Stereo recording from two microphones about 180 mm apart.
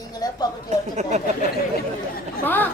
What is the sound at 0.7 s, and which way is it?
Speech, 40° right (ahead or behind).